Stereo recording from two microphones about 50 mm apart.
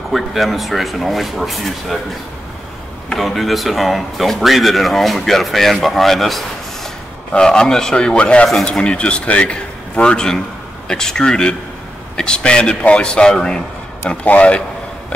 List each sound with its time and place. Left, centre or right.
0.1 s speech: centre
3.2 s speech: centre
7.3 s a man's voice: centre
14.2 s a man's voice: left